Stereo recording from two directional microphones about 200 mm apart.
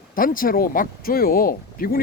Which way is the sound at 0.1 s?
45° left (ahead or behind).